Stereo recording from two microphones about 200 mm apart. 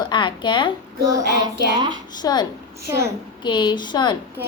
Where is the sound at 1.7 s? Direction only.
20° right (ahead or behind).